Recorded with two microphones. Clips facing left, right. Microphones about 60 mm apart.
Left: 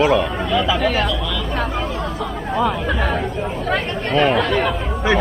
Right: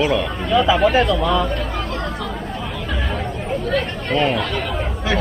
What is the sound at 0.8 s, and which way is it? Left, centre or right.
Speech, right.